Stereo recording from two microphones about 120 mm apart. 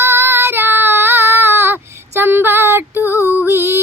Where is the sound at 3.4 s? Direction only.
20° right (ahead or behind).